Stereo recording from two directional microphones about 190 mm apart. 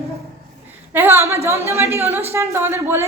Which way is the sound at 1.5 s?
15° right (ahead or behind).